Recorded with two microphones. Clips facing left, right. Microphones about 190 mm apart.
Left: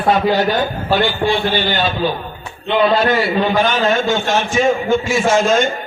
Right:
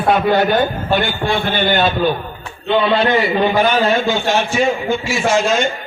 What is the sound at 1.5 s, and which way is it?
Speech, 55° right (ahead or behind).